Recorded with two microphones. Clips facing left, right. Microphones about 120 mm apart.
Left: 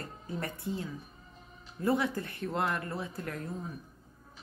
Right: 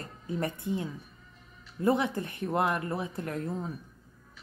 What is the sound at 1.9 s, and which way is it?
A woman's voice, 20° right (ahead or behind).